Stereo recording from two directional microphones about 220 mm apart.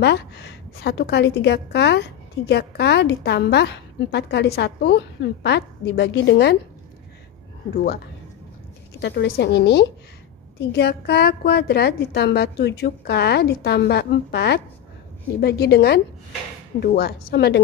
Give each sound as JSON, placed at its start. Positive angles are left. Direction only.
{"t": 0.0, "sound": "a woman's voice", "side_deg": 50}
{"t": 7.7, "sound": "a woman's voice", "side_deg": 45}
{"t": 9.0, "sound": "a woman's voice", "side_deg": 50}